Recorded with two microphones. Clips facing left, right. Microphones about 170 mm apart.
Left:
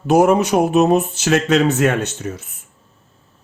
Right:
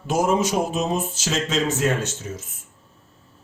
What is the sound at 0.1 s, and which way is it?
A man's voice, 65° left (ahead or behind).